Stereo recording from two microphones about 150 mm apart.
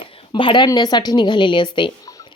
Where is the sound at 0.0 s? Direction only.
35° left (ahead or behind).